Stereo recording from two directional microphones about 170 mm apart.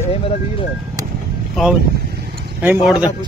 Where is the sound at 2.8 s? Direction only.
5° right (ahead or behind).